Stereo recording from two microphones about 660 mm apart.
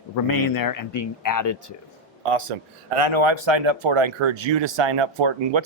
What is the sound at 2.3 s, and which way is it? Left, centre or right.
Speech, right.